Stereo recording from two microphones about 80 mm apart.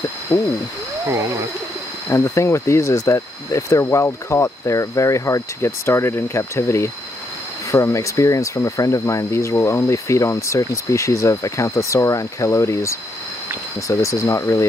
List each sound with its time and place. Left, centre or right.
0.3 s speech: left
2.0 s speech: left